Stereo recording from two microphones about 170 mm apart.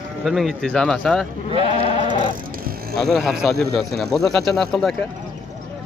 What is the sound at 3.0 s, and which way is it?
Speech, centre (ahead or behind).